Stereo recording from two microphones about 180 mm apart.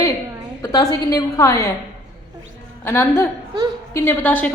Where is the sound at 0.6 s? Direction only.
20° left (ahead or behind).